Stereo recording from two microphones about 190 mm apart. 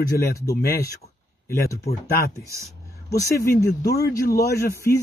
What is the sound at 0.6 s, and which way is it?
Speech, 55° left (ahead or behind).